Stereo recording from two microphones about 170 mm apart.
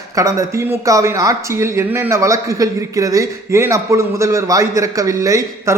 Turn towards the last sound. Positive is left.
turn(degrees=-20)  # may be behind; listen again after turning